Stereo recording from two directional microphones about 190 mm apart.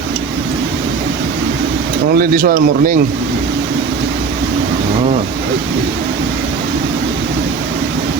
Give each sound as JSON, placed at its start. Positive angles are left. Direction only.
{"t": 2.1, "sound": "speech", "side_deg": -50}